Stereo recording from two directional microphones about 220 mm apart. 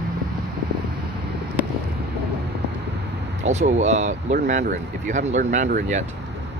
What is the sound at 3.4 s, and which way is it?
Speech, 30° right (ahead or behind).